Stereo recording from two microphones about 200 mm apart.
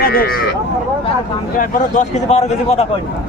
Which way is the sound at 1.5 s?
40° left (ahead or behind).